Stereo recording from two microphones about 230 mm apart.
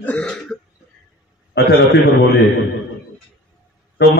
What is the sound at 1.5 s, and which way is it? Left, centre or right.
Speech, left.